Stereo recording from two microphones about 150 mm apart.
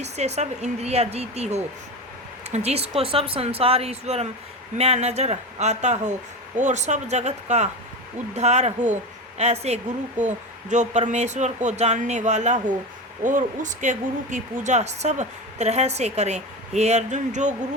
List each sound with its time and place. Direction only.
0.0 s speech: 45° right (ahead or behind)